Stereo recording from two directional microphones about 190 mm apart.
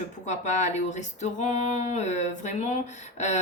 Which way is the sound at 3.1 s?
40° left (ahead or behind).